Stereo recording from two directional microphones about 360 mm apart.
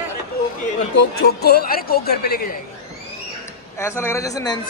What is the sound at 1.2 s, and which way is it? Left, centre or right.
A woman's voice, left.